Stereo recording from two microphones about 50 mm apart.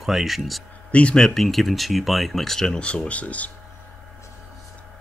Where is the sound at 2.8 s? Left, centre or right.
Left.